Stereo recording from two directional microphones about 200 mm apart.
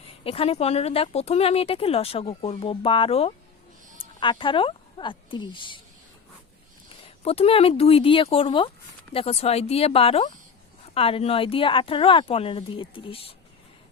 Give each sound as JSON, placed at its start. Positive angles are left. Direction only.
{"t": 0.3, "sound": "speech", "side_deg": 30}
{"t": 7.2, "sound": "speech", "side_deg": 30}